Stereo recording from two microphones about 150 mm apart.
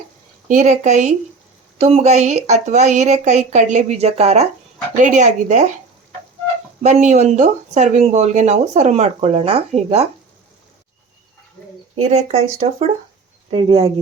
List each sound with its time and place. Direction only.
0.4 s a woman's voice: 55° right (ahead or behind)
6.8 s speech: 50° right (ahead or behind)
12.0 s speech: 45° right (ahead or behind)
13.5 s speech: 35° right (ahead or behind)